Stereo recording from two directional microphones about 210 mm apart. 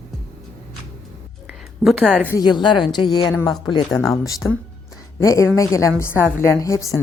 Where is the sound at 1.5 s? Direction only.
Centre (ahead or behind).